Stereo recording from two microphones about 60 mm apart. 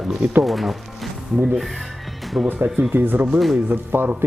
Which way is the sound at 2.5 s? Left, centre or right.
Right.